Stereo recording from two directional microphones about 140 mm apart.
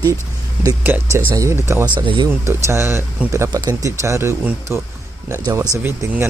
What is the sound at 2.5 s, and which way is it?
Speech, 20° right (ahead or behind).